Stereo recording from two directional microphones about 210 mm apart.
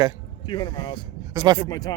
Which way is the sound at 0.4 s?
20° left (ahead or behind).